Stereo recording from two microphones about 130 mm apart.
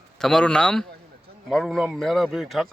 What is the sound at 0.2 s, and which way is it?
Speech, 5° left (ahead or behind).